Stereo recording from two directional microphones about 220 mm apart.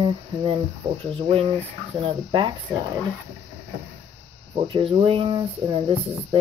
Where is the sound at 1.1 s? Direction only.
25° right (ahead or behind).